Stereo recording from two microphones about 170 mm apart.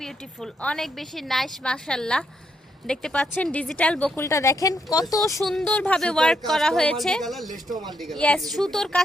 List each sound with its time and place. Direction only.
0.0 s a woman's voice: centre (ahead or behind); by 5.4 s 20° left (ahead or behind)
5.4 s a woman's voice: centre (ahead or behind)
7.5 s speech: 20° right (ahead or behind)
7.9 s a woman's voice: centre (ahead or behind)